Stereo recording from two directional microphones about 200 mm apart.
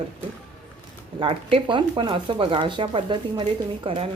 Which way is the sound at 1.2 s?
25° right (ahead or behind).